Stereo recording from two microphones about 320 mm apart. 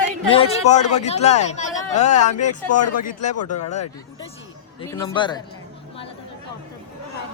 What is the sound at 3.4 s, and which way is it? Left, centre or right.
Speech, left.